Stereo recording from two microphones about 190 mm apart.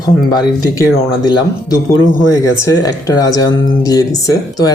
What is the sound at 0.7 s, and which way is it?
Speech, 20° left (ahead or behind).